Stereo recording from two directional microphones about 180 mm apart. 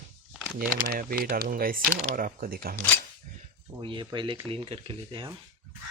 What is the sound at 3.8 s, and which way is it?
Speech, 25° right (ahead or behind).